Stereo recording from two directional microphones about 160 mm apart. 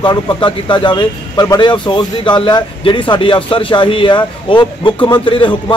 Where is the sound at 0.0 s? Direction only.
30° left (ahead or behind).